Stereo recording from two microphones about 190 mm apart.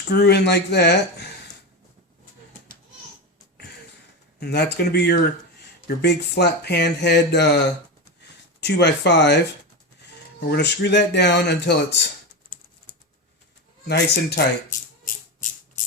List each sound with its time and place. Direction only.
0.1 s speech: 60° left (ahead or behind)
4.4 s speech: 60° left (ahead or behind)
10.5 s speech: 65° left (ahead or behind)
13.8 s speech: 60° left (ahead or behind)
15.0 s music: 45° left (ahead or behind)